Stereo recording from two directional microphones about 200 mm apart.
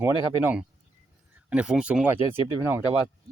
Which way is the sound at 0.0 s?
10° right (ahead or behind).